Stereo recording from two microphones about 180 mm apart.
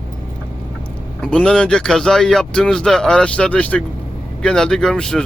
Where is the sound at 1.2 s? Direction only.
5° left (ahead or behind).